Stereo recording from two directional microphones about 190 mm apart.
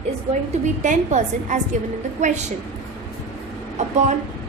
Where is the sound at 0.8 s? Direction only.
40° right (ahead or behind).